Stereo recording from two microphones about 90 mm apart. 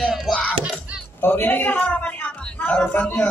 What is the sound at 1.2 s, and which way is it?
A woman's voice, 25° left (ahead or behind).